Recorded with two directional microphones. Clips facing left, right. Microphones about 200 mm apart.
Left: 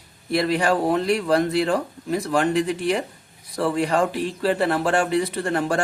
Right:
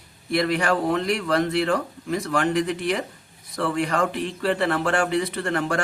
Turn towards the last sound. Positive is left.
turn(degrees=30)  # may be behind; listen again after turning